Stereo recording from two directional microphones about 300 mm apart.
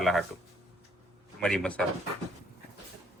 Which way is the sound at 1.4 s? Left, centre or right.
Centre.